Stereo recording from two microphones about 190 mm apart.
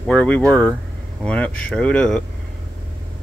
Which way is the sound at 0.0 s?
5° left (ahead or behind).